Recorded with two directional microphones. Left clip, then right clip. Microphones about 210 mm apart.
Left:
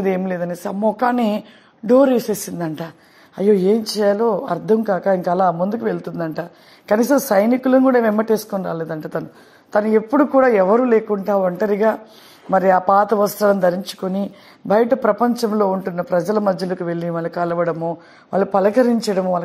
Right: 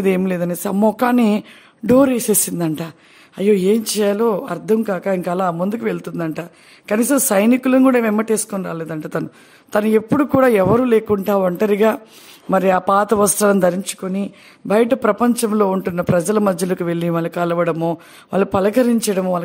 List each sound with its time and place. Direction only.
0.0 s a man's voice: 55° right (ahead or behind)
0.7 s a man's voice: 35° right (ahead or behind)
3.8 s a man's voice: 25° right (ahead or behind)
13.8 s speech: 15° right (ahead or behind)
14.8 s a man's voice: 25° right (ahead or behind)